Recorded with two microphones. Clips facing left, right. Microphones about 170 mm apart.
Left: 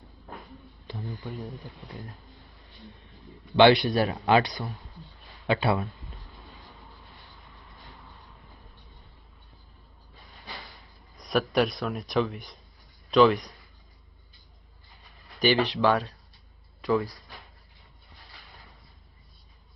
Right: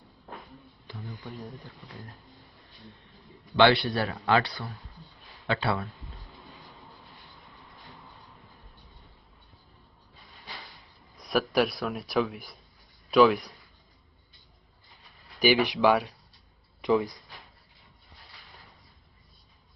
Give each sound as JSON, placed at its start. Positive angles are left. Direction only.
{"t": 0.9, "sound": "a sound", "side_deg": 20}
{"t": 3.5, "sound": "a man's voice", "side_deg": 20}
{"t": 11.2, "sound": "a man's voice", "side_deg": 0}
{"t": 15.4, "sound": "speech", "side_deg": -10}